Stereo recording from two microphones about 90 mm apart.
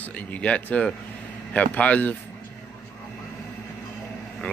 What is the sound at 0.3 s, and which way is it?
Speech, 15° left (ahead or behind).